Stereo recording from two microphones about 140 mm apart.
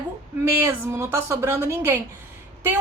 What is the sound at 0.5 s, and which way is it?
A woman's voice, 15° right (ahead or behind).